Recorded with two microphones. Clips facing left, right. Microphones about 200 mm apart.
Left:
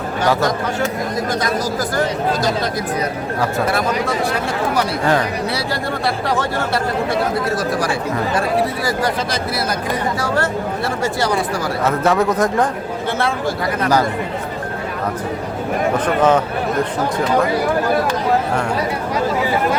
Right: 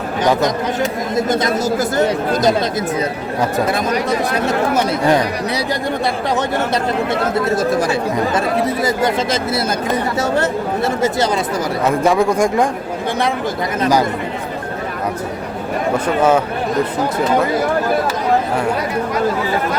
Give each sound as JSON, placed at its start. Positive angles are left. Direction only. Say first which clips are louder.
{"t": 0.3, "sound": "speech", "louder": "right 2 dB", "side_deg": -20}
{"t": 4.4, "sound": "speech", "louder": "right 3 dB", "side_deg": -20}
{"t": 7.1, "sound": "speech", "louder": "right 2 dB", "side_deg": -25}
{"t": 16.0, "sound": "speech", "louder": "right 1 dB", "side_deg": -10}